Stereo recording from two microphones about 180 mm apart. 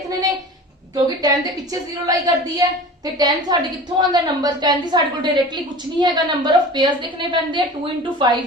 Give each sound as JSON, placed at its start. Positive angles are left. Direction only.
{"t": 0.9, "sound": "a woman's voice", "side_deg": -20}